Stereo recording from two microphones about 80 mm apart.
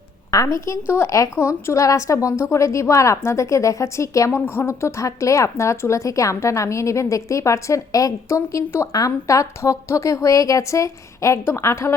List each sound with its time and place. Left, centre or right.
0.3 s a woman's voice: left
4.3 s a woman's voice: left